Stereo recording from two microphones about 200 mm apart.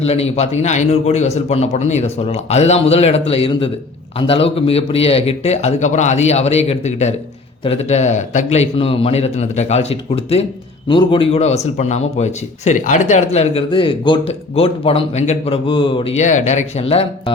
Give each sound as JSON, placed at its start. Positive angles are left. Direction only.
{"t": 0.0, "sound": "a man's voice", "side_deg": 30}